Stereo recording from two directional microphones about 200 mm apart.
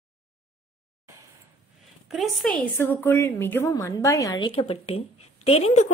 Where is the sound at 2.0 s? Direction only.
Centre (ahead or behind).